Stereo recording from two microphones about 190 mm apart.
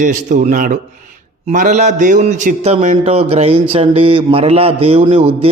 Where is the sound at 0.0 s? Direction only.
40° right (ahead or behind).